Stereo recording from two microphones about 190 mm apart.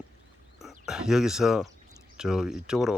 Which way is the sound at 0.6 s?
5° right (ahead or behind).